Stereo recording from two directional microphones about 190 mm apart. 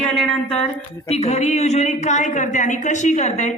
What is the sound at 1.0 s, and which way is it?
A woman's voice, 35° left (ahead or behind).